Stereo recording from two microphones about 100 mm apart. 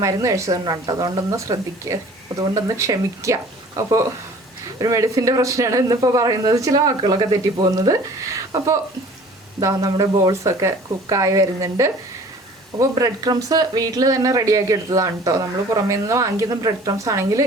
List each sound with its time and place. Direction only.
0.0 s speech: 35° right (ahead or behind)
8.3 s a sound: 35° right (ahead or behind)
9.6 s speech: 35° right (ahead or behind)